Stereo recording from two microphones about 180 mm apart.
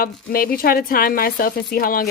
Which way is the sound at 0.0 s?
55° left (ahead or behind).